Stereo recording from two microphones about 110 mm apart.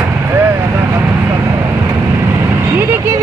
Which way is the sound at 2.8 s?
20° right (ahead or behind).